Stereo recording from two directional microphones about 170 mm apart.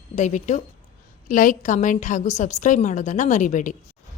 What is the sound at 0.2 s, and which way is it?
A woman's voice, 45° left (ahead or behind).